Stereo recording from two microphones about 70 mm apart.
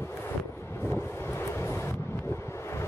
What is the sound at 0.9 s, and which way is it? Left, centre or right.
Wind noise, left.